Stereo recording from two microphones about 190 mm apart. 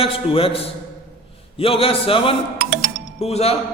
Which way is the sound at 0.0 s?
30° left (ahead or behind).